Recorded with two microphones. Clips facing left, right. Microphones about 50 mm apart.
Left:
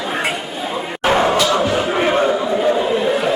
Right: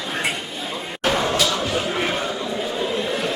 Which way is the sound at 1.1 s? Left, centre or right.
Left.